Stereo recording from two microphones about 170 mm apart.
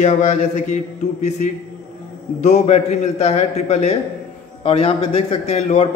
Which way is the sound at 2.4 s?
40° left (ahead or behind).